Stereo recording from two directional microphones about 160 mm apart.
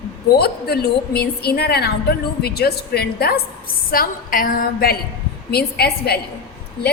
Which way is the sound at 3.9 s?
65° left (ahead or behind).